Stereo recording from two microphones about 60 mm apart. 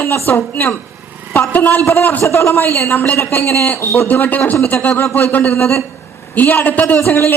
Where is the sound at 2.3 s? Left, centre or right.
Left.